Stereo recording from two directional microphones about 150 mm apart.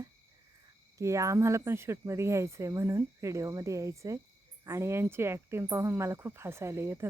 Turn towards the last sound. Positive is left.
turn(degrees=-15)  # may be behind; listen again after turning